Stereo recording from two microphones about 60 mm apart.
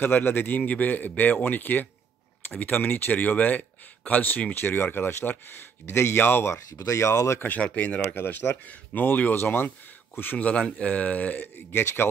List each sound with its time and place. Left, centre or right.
0.0 s speech: left
6.5 s speech: left
7.3 s speech: left
11.4 s speech: left